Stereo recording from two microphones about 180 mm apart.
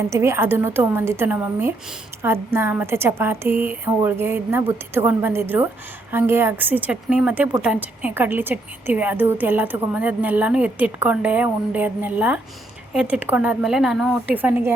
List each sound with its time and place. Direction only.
0.1 s a woman's voice: 15° right (ahead or behind)